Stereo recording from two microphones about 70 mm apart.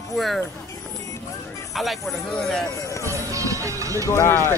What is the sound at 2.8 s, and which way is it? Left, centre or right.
Music, left.